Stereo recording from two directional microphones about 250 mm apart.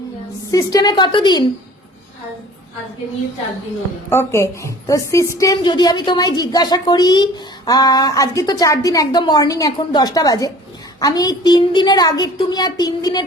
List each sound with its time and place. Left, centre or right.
0.5 s speech: centre
4.1 s speech: centre